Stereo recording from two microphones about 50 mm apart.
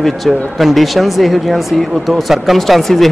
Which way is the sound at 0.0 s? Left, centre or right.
Centre.